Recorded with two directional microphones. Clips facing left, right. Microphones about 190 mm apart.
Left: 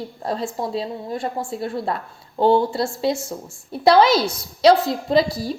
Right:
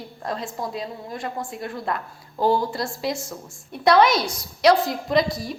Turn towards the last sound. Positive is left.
turn(degrees=30)  # may be behind; listen again after turning